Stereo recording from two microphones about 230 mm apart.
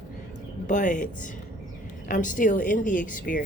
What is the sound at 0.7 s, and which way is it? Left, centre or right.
Speech, left.